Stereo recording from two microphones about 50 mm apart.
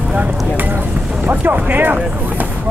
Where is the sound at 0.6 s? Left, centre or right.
Right.